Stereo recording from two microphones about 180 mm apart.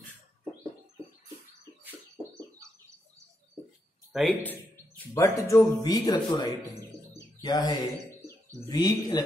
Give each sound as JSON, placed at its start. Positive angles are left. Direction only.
{"t": 4.1, "sound": "a man's voice", "side_deg": 0}
{"t": 4.5, "sound": "a man's voice", "side_deg": 10}